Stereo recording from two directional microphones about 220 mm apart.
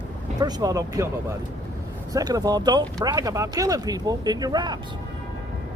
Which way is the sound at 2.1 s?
15° right (ahead or behind).